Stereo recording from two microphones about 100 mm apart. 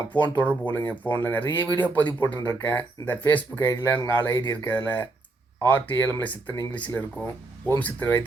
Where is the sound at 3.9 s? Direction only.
25° left (ahead or behind).